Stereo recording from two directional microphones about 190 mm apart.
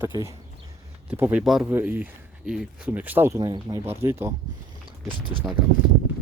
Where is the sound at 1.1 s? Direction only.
10° right (ahead or behind).